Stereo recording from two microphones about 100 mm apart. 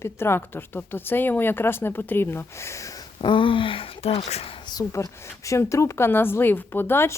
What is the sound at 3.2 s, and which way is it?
Speech, 55° left (ahead or behind).